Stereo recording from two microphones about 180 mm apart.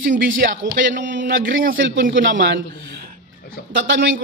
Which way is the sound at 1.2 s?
50° right (ahead or behind).